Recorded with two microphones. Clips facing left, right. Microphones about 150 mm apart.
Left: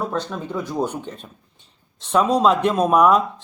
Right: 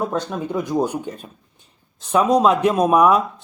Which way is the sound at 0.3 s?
15° right (ahead or behind).